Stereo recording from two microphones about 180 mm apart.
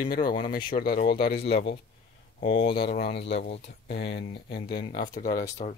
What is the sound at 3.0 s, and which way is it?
Speech, 70° left (ahead or behind).